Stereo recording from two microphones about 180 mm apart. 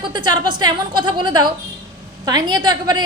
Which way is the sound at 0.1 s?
25° right (ahead or behind).